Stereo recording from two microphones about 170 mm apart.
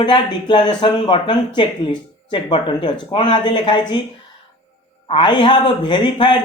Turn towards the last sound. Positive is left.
turn(degrees=30)  # may be behind; listen again after turning